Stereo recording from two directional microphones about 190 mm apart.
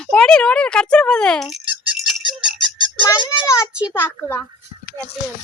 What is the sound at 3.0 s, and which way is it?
Speech, 20° left (ahead or behind).